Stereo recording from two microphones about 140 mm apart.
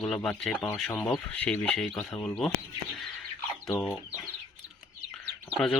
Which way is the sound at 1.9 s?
25° left (ahead or behind).